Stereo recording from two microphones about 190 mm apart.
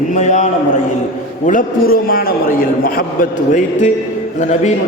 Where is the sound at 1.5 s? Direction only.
45° left (ahead or behind).